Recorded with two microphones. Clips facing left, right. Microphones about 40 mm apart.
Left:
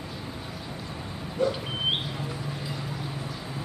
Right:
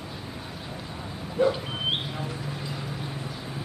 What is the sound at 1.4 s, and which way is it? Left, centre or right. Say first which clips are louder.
Dog: right 3 dB; right.